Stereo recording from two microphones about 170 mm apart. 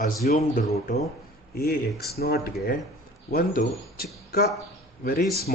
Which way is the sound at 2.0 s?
65° left (ahead or behind).